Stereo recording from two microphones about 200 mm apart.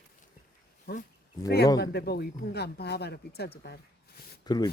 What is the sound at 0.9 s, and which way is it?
Speech, 50° left (ahead or behind).